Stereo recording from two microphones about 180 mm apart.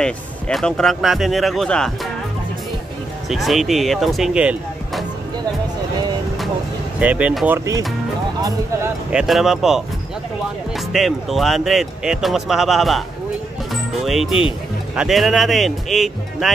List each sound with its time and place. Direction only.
0.0 s speech: 5° left (ahead or behind)
3.3 s speech: centre (ahead or behind)
7.0 s speech: 10° right (ahead or behind)
9.1 s speech: centre (ahead or behind)
10.9 s speech: centre (ahead or behind)